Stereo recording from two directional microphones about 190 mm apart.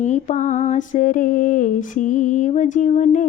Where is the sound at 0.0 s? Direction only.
40° left (ahead or behind).